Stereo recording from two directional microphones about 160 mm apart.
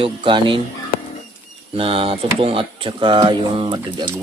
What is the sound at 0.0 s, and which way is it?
Speech, 30° right (ahead or behind).